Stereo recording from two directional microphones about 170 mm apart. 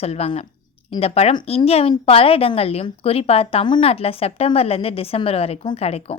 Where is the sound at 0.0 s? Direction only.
35° left (ahead or behind).